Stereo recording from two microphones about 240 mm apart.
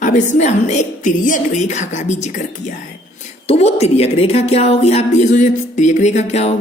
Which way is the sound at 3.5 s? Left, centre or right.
Left.